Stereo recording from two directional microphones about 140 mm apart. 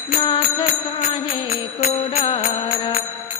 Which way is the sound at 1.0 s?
55° left (ahead or behind).